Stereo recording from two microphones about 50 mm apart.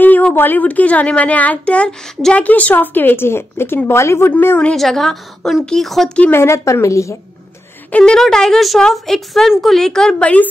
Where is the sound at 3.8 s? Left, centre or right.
Left.